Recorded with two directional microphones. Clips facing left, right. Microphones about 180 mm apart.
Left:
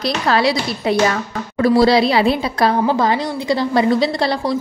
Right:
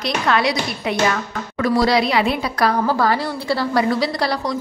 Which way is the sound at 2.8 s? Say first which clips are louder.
Left 2 dB; 20° left (ahead or behind).